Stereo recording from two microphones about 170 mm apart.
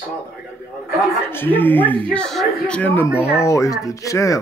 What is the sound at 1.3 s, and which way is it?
Speech, 10° left (ahead or behind).